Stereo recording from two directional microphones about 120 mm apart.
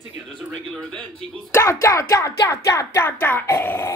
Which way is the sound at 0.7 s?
10° left (ahead or behind).